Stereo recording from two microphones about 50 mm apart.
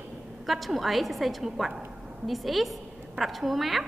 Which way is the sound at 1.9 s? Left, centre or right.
Centre.